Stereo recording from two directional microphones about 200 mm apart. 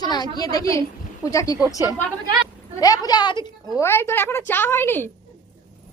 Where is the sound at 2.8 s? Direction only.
20° left (ahead or behind).